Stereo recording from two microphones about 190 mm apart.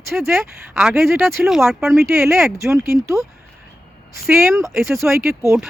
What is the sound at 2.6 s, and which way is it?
Speech, 15° right (ahead or behind).